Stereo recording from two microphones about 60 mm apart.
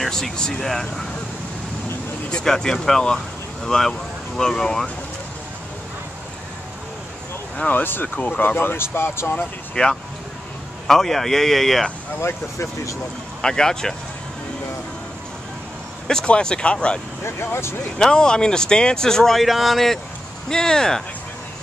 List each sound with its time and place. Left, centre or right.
0.0 s speech: centre
2.3 s speech: centre
7.5 s speech: left
9.8 s speech: left
10.9 s speech: centre
12.2 s speech: left
13.4 s speech: centre
16.1 s speech: centre
17.2 s speech: left
17.9 s speech: centre